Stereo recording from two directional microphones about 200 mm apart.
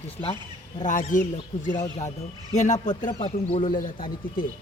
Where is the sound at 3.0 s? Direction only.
25° left (ahead or behind).